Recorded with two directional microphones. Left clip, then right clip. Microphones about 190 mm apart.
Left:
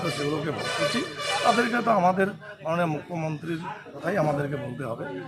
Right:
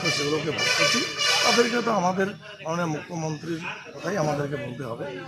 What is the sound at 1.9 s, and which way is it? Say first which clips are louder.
Speech: left 2 dB; 10° left (ahead or behind).